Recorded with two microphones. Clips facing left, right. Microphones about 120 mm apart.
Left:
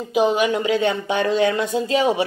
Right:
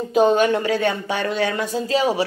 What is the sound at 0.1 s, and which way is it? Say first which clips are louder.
Speech: right 2 dB; 10° left (ahead or behind).